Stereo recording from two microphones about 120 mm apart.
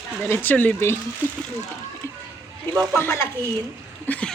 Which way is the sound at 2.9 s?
20° left (ahead or behind).